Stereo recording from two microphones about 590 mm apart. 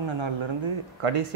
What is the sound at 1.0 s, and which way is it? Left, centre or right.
Speech, right.